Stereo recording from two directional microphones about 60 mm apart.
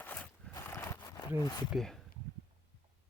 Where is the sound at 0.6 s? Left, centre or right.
Left.